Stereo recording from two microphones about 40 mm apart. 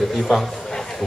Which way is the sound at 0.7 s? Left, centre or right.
Centre.